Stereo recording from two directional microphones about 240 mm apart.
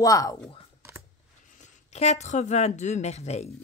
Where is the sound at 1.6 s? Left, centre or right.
Left.